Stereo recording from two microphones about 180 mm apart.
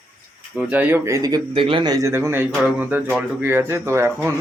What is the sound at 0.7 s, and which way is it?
Speech, 10° right (ahead or behind).